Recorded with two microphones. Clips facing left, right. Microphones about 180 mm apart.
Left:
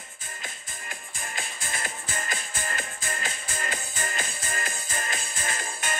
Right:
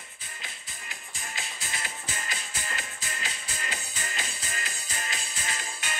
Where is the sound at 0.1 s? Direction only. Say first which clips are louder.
Left 6 dB; 45° left (ahead or behind).